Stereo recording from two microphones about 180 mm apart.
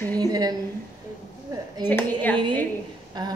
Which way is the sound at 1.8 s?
20° right (ahead or behind).